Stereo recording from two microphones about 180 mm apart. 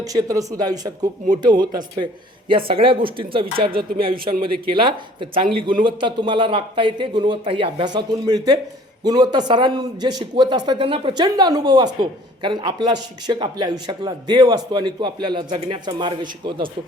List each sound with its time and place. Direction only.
0.0 s a man's voice: 20° right (ahead or behind)